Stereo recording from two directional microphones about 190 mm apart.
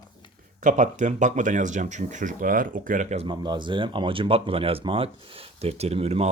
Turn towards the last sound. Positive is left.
turn(degrees=-30)  # may be behind; listen again after turning